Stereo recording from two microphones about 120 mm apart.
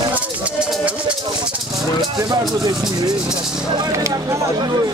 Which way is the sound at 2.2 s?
35° right (ahead or behind).